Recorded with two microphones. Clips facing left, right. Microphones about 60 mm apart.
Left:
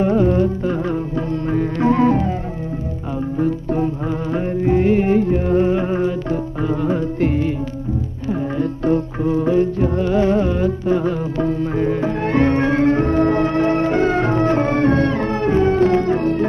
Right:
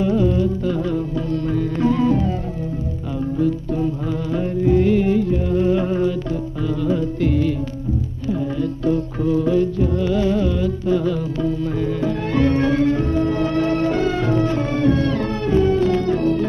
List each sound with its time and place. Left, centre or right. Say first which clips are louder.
0.0 s music: left 3 dB; left
3.3 s music: left 2 dB; left